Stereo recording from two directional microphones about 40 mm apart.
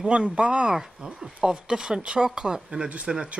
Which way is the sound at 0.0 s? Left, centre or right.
Right.